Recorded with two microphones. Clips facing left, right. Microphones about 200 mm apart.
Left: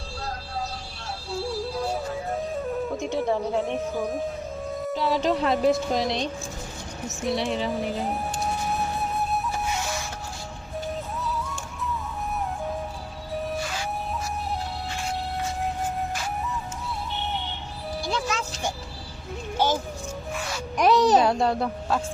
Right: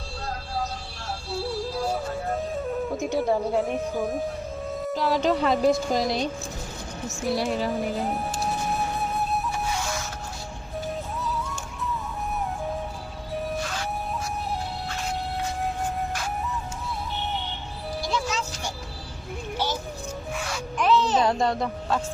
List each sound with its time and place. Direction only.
3.2 s speech: 5° right (ahead or behind)
9.0 s music: centre (ahead or behind)
11.2 s music: centre (ahead or behind)
18.1 s music: 55° left (ahead or behind)
19.5 s vehicle: 50° left (ahead or behind)
20.7 s a sound: 40° left (ahead or behind)
21.2 s speech: 10° left (ahead or behind)